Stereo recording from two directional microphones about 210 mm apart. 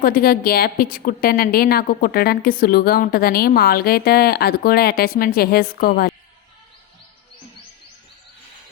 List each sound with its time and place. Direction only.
0.0 s a woman's voice: 45° left (ahead or behind)